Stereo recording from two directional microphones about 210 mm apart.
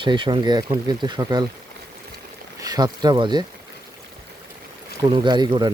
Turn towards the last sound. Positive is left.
turn(degrees=-20)  # may be behind; listen again after turning